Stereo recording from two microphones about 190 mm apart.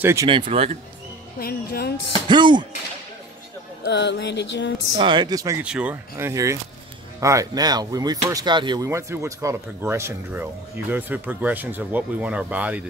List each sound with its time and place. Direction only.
0.0 s speech: 15° right (ahead or behind)
0.3 s speech: 30° right (ahead or behind)
1.4 s speech: 55° left (ahead or behind)
2.2 s speech: 25° right (ahead or behind)
3.8 s music: 65° left (ahead or behind)
4.9 s speech: 25° right (ahead or behind)
5.6 s speech: 5° right (ahead or behind)